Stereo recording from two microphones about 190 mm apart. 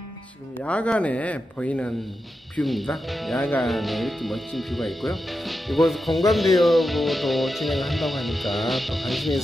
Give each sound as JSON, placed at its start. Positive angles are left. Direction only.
{"t": 0.6, "sound": "speech", "side_deg": 5}